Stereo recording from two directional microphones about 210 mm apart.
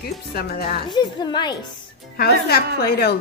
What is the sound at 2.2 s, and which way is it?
Speech, 50° left (ahead or behind).